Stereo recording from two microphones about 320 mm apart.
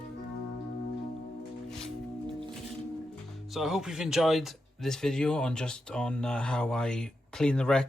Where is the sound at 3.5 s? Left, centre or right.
Centre.